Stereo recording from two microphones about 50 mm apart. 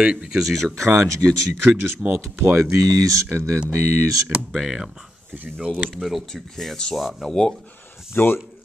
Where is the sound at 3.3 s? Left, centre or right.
Right.